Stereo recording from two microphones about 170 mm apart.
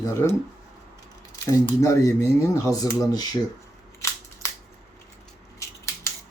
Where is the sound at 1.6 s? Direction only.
15° left (ahead or behind).